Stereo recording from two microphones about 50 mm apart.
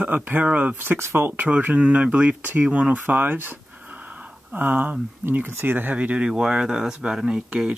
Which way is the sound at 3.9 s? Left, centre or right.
Right.